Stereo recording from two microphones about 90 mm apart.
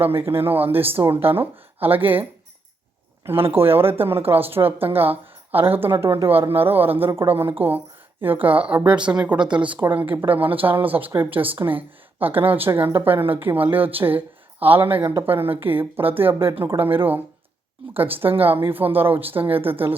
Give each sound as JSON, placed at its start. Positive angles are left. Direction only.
{"t": 0.0, "sound": "a woman's voice", "side_deg": -25}
{"t": 3.2, "sound": "a woman's voice", "side_deg": -25}